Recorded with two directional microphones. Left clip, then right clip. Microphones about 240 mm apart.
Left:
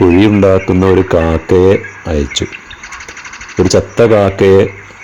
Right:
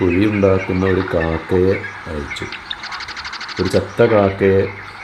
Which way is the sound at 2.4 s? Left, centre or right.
Left.